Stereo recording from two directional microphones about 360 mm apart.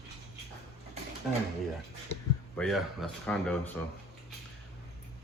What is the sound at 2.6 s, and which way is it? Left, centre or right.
Speech, centre.